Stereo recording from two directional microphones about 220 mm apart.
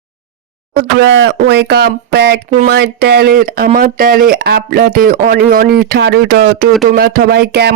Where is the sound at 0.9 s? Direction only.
50° right (ahead or behind).